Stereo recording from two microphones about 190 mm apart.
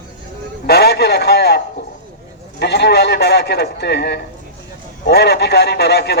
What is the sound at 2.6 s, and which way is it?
A woman's voice, 60° left (ahead or behind).